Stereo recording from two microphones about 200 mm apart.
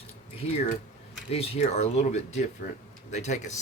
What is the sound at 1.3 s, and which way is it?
Speech, 30° left (ahead or behind).